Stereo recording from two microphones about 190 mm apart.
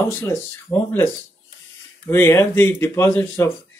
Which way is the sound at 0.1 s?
15° left (ahead or behind).